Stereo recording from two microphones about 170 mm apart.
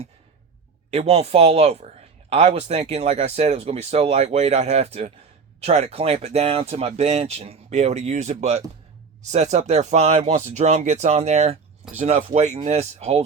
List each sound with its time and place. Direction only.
0.9 s speech: 35° right (ahead or behind)